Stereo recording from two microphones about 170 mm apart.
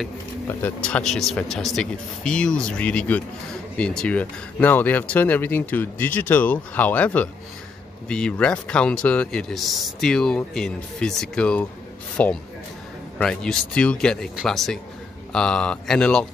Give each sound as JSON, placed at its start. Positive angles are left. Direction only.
{"t": 0.5, "sound": "a man's voice", "side_deg": 10}